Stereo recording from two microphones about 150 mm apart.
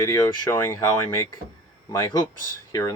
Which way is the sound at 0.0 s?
25° left (ahead or behind).